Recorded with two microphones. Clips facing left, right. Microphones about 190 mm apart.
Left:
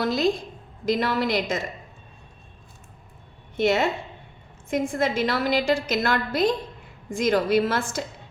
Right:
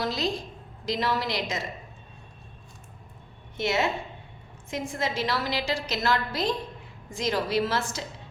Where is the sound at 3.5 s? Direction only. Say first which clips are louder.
Left 5 dB; 55° left (ahead or behind).